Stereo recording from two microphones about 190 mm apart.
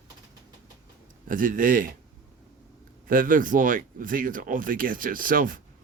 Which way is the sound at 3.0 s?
45° right (ahead or behind).